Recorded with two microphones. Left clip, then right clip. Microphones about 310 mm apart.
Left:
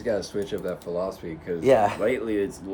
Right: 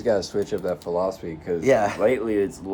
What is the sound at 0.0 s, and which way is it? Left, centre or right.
Speech, centre.